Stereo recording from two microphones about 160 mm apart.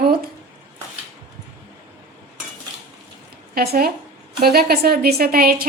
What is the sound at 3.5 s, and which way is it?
Speech, 65° right (ahead or behind).